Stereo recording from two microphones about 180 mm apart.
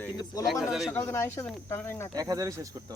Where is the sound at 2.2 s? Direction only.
20° right (ahead or behind).